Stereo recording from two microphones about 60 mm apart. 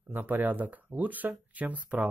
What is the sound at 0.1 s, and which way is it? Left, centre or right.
Speech, right.